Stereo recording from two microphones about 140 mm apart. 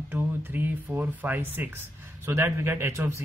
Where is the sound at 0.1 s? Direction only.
15° right (ahead or behind).